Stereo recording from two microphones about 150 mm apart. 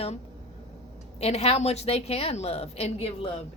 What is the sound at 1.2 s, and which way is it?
A woman's voice, 45° left (ahead or behind).